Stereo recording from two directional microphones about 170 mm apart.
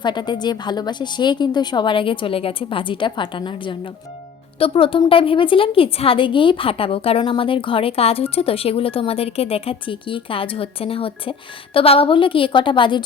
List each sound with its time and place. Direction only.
0.0 s a woman's voice: 25° left (ahead or behind)